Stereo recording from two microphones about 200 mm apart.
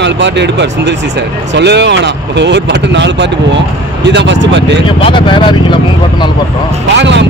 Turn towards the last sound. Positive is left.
turn(degrees=-60)  # may be behind; listen again after turning